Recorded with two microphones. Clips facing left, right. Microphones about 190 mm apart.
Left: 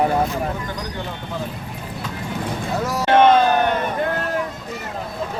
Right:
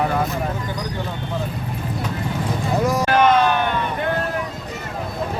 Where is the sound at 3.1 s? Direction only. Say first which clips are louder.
Left 4 dB; 25° left (ahead or behind).